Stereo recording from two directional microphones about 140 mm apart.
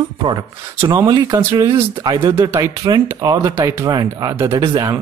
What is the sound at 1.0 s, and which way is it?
Speech, 30° right (ahead or behind).